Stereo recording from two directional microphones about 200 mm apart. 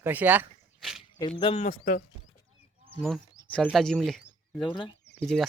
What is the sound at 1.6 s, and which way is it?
Speech, 40° left (ahead or behind).